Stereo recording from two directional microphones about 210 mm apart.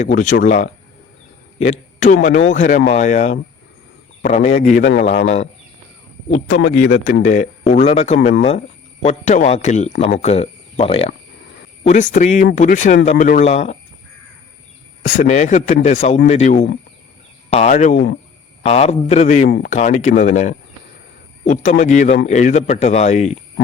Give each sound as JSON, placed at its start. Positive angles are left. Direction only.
{"t": 0.0, "sound": "speech", "side_deg": 35}
{"t": 1.5, "sound": "a sound", "side_deg": 30}
{"t": 2.2, "sound": "speech", "side_deg": 35}
{"t": 6.5, "sound": "speech", "side_deg": 65}
{"t": 6.9, "sound": "speech", "side_deg": 35}
{"t": 15.0, "sound": "speech", "side_deg": 35}
{"t": 19.5, "sound": "speech", "side_deg": 55}
{"t": 19.7, "sound": "speech", "side_deg": 35}